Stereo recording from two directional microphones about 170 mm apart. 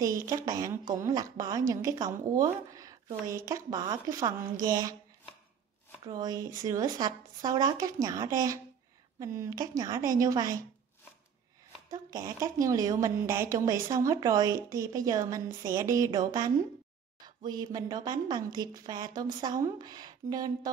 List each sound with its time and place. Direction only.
0.3 s a woman's voice: 20° right (ahead or behind)
6.0 s a woman's voice: 25° right (ahead or behind)
11.9 s a woman's voice: 20° right (ahead or behind)